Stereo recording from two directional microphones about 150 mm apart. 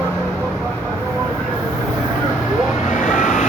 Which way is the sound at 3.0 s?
55° left (ahead or behind).